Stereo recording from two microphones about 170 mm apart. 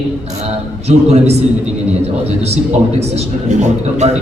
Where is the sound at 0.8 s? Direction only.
40° right (ahead or behind).